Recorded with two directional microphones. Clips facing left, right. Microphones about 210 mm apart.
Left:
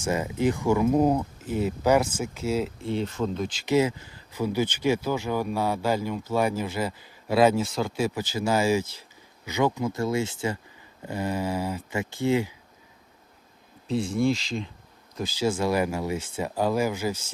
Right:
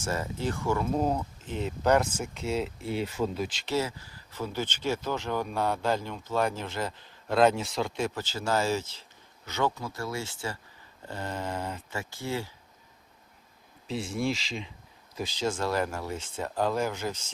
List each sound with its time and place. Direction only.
0.0 s speech: 15° left (ahead or behind); by 3.7 s centre (ahead or behind)
3.7 s speech: 15° left (ahead or behind)
11.9 s speech: 20° left (ahead or behind)
13.8 s speech: centre (ahead or behind)